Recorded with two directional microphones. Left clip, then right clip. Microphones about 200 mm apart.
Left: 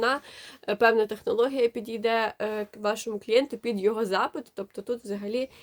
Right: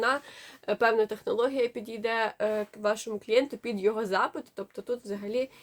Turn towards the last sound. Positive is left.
turn(degrees=40)  # may be behind; listen again after turning